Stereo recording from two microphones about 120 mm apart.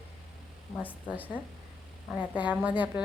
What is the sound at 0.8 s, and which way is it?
A woman's voice, 15° right (ahead or behind).